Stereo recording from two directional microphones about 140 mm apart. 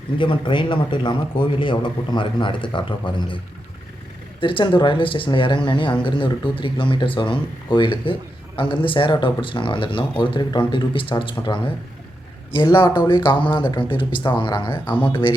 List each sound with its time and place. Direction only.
0.2 s speech: 35° left (ahead or behind)
4.4 s speech: 35° left (ahead or behind)
12.5 s speech: 35° left (ahead or behind)